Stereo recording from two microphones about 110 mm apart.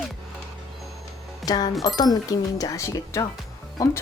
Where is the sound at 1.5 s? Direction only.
40° left (ahead or behind).